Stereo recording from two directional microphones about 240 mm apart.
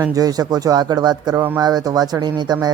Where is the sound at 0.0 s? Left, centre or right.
Centre.